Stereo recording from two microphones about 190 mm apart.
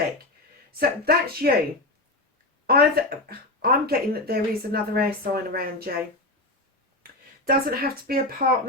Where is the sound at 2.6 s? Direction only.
55° right (ahead or behind).